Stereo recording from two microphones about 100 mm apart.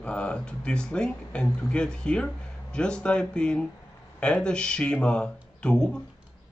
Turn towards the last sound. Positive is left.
turn(degrees=10)  # may be behind; listen again after turning